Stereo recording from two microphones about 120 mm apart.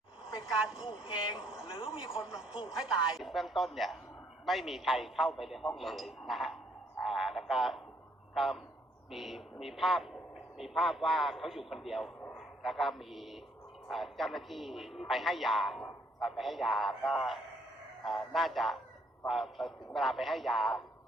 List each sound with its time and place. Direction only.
0.4 s a woman's voice: 5° right (ahead or behind)
0.9 s speech: 40° left (ahead or behind)
2.2 s a woman's voice: 5° right (ahead or behind)
7.0 s a sound: centre (ahead or behind)
8.4 s a man's voice: centre (ahead or behind)